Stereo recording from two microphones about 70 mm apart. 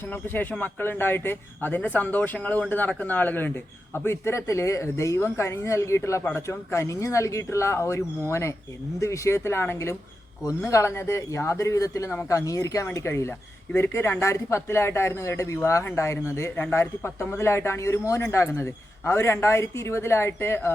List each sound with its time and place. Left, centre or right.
0.0 s a man's voice: left